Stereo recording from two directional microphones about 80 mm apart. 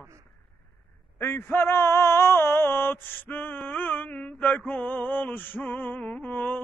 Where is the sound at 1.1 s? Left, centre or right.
Left.